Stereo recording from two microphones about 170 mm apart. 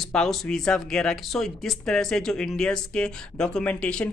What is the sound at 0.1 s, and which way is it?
Speech, 5° left (ahead or behind).